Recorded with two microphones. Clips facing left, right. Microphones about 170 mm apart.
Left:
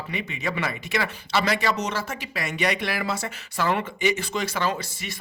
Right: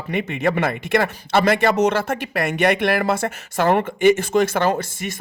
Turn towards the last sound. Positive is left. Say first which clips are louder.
# right 7 dB
turn(degrees=-50)  # may be behind; listen again after turning